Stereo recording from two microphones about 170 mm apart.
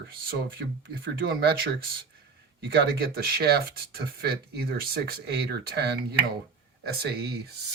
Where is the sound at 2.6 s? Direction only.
70° right (ahead or behind).